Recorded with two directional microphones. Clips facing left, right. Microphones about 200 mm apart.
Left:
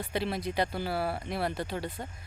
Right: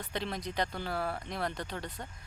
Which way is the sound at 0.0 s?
10° left (ahead or behind).